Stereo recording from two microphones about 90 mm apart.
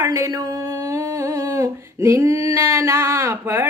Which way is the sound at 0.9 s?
35° right (ahead or behind).